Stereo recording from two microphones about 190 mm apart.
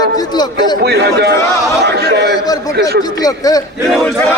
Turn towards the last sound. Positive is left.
turn(degrees=0)  # may be behind; listen again after turning